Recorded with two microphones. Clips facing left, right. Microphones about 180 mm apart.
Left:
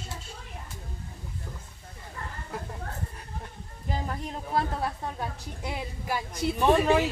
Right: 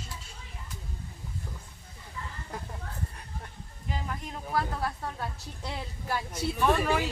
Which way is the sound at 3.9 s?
30° left (ahead or behind).